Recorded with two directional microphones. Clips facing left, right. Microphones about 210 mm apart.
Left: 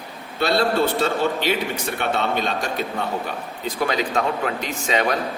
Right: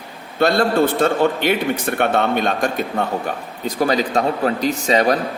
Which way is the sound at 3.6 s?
40° right (ahead or behind).